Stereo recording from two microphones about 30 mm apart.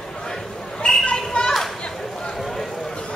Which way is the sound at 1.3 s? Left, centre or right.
Left.